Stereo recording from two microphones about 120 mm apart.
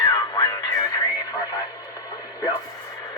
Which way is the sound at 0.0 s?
30° left (ahead or behind).